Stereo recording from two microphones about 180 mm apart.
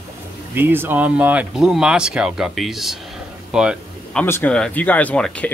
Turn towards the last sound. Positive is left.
turn(degrees=5)  # may be behind; listen again after turning